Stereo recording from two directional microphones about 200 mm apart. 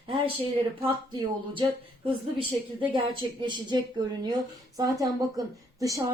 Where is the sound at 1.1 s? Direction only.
25° right (ahead or behind).